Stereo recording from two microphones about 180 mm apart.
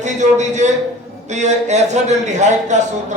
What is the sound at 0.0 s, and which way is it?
A man's voice, 40° right (ahead or behind).